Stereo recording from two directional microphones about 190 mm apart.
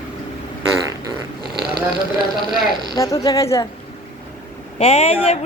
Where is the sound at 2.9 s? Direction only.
20° left (ahead or behind).